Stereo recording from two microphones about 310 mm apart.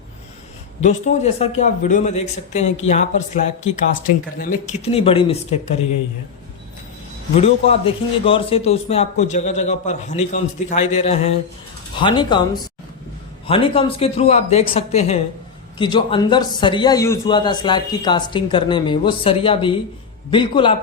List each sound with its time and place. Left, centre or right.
0.8 s a man's voice: left
7.3 s a man's voice: centre
13.5 s a man's voice: centre